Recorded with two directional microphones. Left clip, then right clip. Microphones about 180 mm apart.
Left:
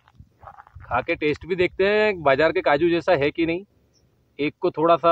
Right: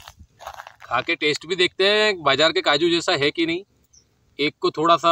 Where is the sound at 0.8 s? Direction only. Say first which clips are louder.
Right 1 dB; 35° left (ahead or behind).